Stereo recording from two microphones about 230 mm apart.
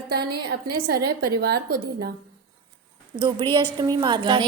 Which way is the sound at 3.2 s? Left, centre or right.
Centre.